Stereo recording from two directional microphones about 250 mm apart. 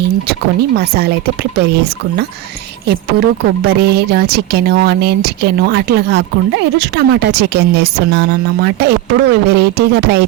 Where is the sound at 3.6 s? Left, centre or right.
Right.